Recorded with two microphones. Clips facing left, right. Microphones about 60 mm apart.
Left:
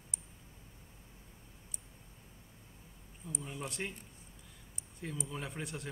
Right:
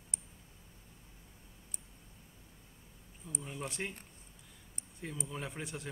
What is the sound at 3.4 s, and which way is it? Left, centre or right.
Speech, centre.